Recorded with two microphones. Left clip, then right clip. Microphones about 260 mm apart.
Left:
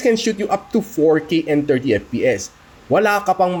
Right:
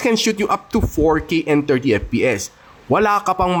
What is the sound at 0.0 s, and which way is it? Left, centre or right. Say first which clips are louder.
Speech: even; right.